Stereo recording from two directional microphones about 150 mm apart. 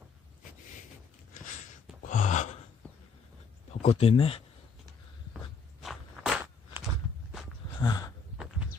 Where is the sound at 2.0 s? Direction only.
55° left (ahead or behind).